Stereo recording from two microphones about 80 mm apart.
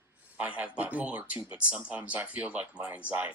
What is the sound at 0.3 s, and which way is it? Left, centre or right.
Speech, centre.